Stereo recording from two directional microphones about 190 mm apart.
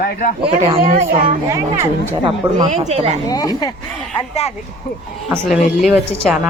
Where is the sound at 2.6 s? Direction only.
35° right (ahead or behind).